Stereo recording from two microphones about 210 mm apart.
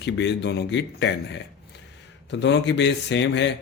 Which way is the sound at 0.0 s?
55° left (ahead or behind).